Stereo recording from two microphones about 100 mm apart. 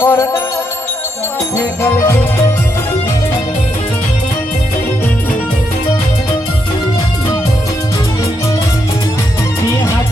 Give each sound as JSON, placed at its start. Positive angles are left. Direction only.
{"t": 0.0, "sound": "music", "side_deg": 30}
{"t": 1.5, "sound": "music", "side_deg": 25}